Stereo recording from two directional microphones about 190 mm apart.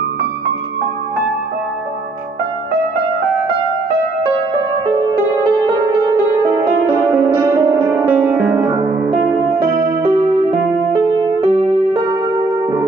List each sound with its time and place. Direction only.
6.0 s music: 20° right (ahead or behind)
11.4 s music: 20° right (ahead or behind)